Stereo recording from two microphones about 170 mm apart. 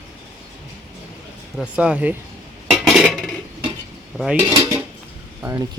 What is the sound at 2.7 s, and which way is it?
Dishes, centre (ahead or behind).